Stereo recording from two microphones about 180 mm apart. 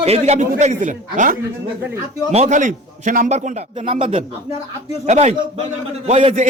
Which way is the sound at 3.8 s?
30° right (ahead or behind).